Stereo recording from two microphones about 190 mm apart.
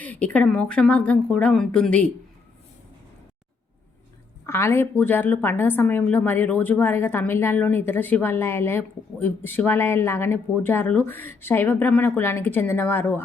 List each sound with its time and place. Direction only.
0.0 s a woman's voice: 10° left (ahead or behind)
4.4 s a woman's voice: 15° left (ahead or behind)